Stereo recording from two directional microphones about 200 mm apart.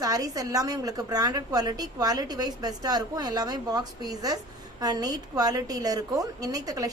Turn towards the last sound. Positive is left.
turn(degrees=-15)  # may be behind; listen again after turning